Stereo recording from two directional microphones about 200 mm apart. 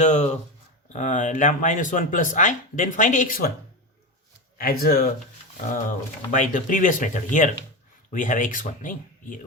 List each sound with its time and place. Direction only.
0.0 s speech: 35° left (ahead or behind)
4.5 s speech: 45° left (ahead or behind)
6.3 s speech: 40° left (ahead or behind)